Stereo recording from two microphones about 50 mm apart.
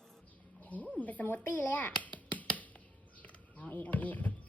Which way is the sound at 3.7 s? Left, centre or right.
Left.